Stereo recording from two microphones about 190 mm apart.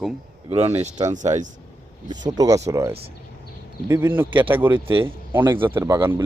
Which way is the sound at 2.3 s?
20° right (ahead or behind).